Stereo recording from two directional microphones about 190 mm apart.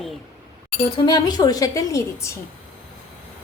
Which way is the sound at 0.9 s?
25° left (ahead or behind).